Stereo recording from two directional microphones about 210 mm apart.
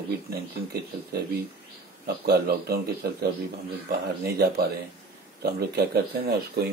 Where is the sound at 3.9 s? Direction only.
50° right (ahead or behind).